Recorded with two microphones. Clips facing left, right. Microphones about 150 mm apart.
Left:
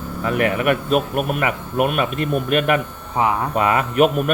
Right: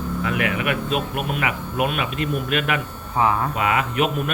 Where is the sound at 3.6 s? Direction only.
40° left (ahead or behind).